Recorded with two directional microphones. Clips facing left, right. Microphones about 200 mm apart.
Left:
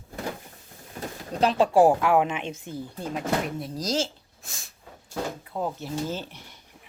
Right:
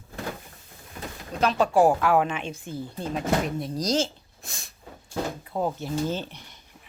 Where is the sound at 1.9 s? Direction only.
20° left (ahead or behind).